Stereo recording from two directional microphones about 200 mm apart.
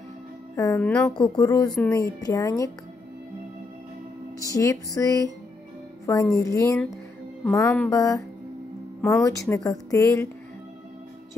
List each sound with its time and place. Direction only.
0.6 s a woman's voice: 15° left (ahead or behind)
1.1 s speech: 20° left (ahead or behind)
1.8 s a woman's voice: 5° left (ahead or behind)
2.2 s a woman's voice: 15° left (ahead or behind)
4.4 s a woman's voice: 15° left (ahead or behind)
6.3 s a woman's voice: 15° left (ahead or behind)
9.2 s a woman's voice: 15° left (ahead or behind)